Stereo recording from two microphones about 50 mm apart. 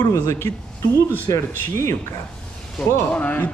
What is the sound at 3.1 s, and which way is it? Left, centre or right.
Speech, left.